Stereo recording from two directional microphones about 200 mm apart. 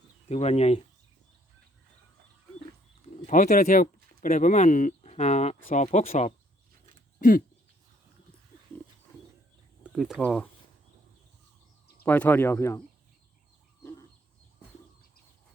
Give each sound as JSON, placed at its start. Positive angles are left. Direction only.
{"t": 0.3, "sound": "speech", "side_deg": 35}
{"t": 3.2, "sound": "speech", "side_deg": 40}
{"t": 7.2, "sound": "speech", "side_deg": 45}
{"t": 9.8, "sound": "speech", "side_deg": 0}
{"t": 12.0, "sound": "speech", "side_deg": 10}